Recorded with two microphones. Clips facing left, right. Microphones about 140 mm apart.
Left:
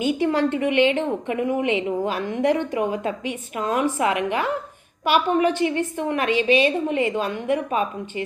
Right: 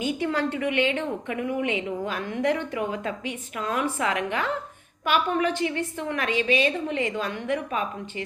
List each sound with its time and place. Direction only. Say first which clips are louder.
0.0 s a woman's voice: left 5 dB; 20° left (ahead or behind)